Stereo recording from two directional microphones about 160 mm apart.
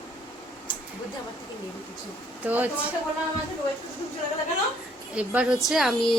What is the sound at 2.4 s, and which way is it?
Speech, 10° right (ahead or behind).